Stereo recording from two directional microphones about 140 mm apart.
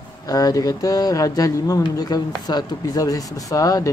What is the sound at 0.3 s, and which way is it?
Speech, 25° left (ahead or behind).